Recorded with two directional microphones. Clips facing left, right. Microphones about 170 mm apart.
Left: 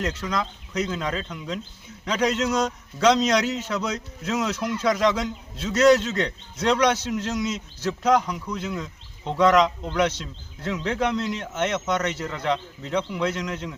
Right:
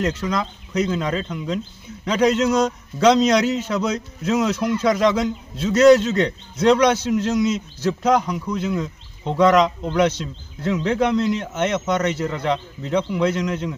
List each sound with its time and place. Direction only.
0.0 s a man's voice: 10° right (ahead or behind)